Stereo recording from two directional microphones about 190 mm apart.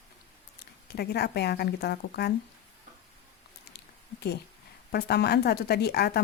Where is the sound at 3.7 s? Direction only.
55° left (ahead or behind).